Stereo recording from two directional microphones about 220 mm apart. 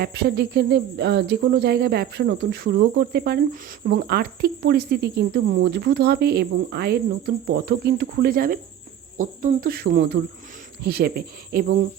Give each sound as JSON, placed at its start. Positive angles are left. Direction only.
{"t": 0.0, "sound": "cricket", "side_deg": -45}